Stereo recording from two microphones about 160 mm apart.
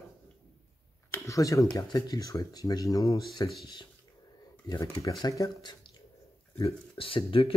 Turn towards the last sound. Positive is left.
turn(degrees=35)  # may be behind; listen again after turning